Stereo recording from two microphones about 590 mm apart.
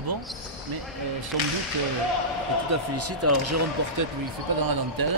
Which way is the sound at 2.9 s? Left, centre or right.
Right.